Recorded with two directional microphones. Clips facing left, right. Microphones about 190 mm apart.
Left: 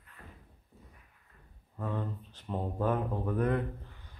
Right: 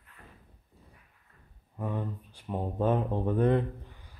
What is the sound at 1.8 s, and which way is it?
Speech, 15° right (ahead or behind).